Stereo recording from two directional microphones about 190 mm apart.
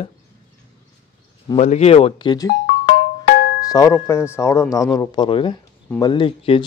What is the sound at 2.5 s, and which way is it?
Music, 60° left (ahead or behind).